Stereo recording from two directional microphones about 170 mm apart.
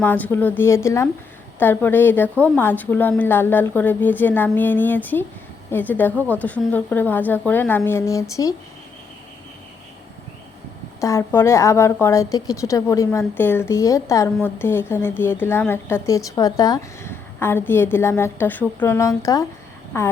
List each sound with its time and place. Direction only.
0.0 s a woman's voice: 10° left (ahead or behind)
11.0 s a woman's voice: 15° left (ahead or behind)